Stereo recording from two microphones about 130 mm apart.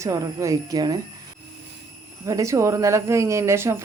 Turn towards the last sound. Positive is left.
turn(degrees=-20)  # may be behind; listen again after turning